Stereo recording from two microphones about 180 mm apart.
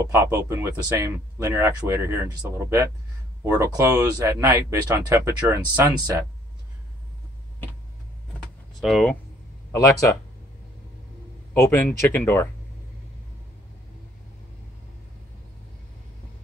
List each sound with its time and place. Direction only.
0.1 s speech: 15° right (ahead or behind)
8.8 s speech: centre (ahead or behind)
11.5 s speech: 10° left (ahead or behind)